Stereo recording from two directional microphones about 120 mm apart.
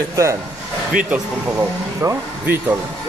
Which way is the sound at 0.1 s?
25° right (ahead or behind).